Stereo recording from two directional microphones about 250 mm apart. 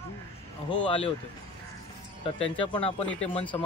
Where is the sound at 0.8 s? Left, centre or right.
Left.